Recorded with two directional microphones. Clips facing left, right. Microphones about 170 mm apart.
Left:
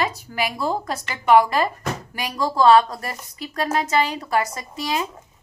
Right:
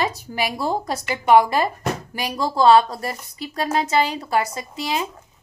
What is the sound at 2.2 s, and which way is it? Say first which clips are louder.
A woman's voice: even; 30° right (ahead or behind).